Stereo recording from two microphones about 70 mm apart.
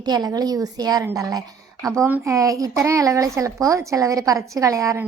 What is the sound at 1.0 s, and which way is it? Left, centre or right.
Speech, right.